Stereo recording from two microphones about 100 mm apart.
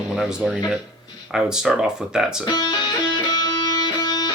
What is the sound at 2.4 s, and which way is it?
Music, 45° left (ahead or behind).